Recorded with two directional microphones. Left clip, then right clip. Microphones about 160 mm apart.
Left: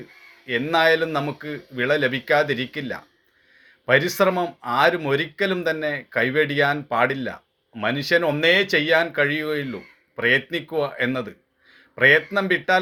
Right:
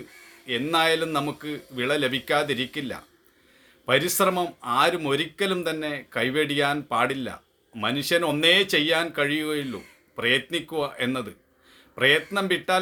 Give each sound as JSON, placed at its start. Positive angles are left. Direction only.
{"t": 0.4, "sound": "speech", "side_deg": -20}